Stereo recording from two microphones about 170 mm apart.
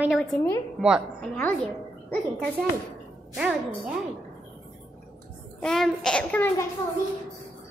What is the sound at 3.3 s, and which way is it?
Speech, 5° right (ahead or behind).